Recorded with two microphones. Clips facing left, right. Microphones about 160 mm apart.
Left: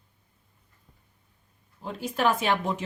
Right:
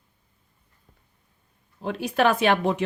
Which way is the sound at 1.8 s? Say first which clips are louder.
Right 4 dB; 70° right (ahead or behind).